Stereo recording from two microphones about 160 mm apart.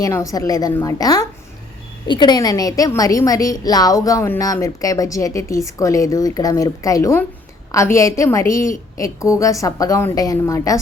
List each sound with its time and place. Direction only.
0.0 s a woman's voice: 20° left (ahead or behind)